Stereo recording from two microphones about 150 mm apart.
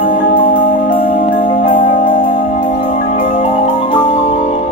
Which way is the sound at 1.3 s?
65° left (ahead or behind).